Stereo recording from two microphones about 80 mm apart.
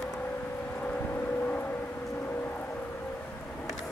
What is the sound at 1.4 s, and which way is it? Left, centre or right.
Vehicle, left.